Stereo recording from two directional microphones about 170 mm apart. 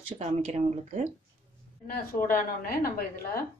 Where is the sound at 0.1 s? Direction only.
40° right (ahead or behind).